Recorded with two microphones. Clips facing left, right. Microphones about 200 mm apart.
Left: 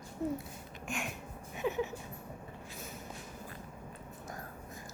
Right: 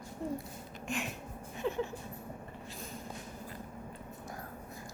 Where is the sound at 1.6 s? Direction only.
10° left (ahead or behind).